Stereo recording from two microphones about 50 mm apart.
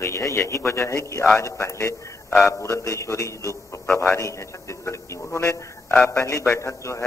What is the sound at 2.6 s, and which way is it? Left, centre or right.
Speech, left.